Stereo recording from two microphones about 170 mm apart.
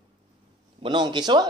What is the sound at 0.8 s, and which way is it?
Speech, 25° right (ahead or behind).